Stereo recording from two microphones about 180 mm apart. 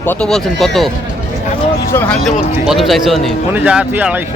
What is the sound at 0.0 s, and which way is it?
Speech, 10° left (ahead or behind).